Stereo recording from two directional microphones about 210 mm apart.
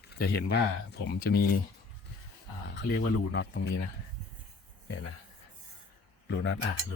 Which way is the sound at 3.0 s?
55° left (ahead or behind).